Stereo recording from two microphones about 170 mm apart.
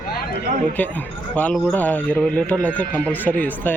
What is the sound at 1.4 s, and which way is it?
A man's voice, 10° left (ahead or behind).